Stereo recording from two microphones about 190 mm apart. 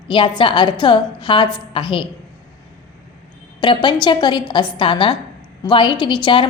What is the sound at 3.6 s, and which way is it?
A woman's voice, 25° left (ahead or behind).